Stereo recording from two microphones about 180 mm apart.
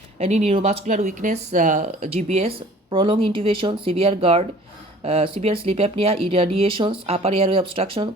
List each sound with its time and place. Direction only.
0.2 s speech: 35° right (ahead or behind)